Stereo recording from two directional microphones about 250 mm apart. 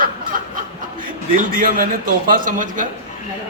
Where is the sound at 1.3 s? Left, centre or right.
Right.